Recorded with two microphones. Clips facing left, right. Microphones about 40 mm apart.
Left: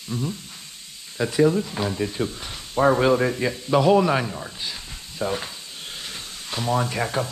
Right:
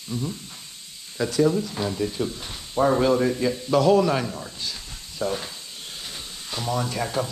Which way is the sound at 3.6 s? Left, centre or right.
Centre.